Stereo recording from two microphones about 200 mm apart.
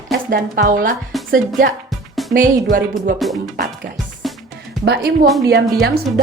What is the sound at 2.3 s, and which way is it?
Speech, 45° right (ahead or behind).